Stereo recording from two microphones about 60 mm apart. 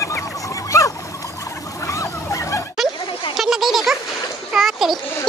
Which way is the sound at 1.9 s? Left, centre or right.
Left.